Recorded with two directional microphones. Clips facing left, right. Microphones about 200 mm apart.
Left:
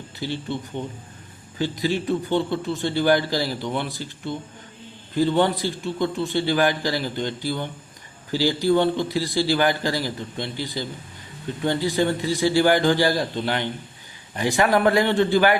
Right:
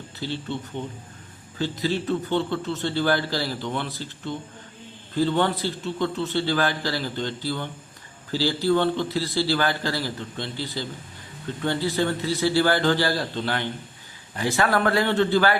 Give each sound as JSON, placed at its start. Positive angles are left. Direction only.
{"t": 0.2, "sound": "a man's voice", "side_deg": 15}